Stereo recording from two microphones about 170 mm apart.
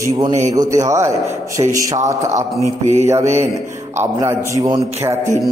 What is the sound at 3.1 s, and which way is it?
Mantra, 15° right (ahead or behind).